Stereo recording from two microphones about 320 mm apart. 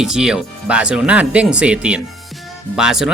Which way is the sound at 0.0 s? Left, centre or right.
Centre.